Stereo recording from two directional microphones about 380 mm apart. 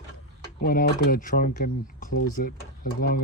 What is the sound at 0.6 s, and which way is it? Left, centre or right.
Speech, left.